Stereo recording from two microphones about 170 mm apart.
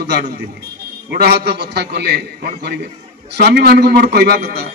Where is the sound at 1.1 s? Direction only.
70° right (ahead or behind).